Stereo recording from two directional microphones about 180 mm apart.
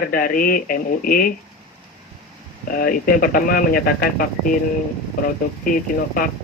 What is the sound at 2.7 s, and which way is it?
Speech, 55° left (ahead or behind).